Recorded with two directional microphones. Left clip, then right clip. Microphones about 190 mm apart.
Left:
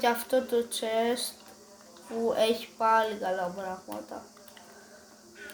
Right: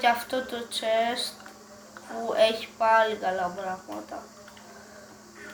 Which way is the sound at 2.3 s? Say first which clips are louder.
Right 5 dB; 50° left (ahead or behind).